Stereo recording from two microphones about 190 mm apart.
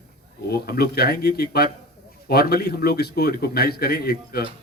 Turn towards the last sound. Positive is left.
turn(degrees=55)  # may be behind; listen again after turning